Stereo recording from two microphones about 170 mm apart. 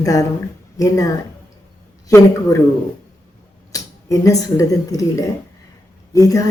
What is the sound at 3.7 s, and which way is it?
Speech, 20° left (ahead or behind).